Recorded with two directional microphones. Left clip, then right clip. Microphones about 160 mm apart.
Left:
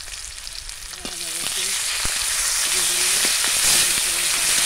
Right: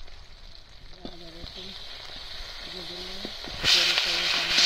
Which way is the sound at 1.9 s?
40° left (ahead or behind).